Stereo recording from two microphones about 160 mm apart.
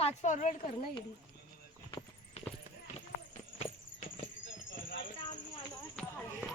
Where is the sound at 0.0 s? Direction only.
45° left (ahead or behind).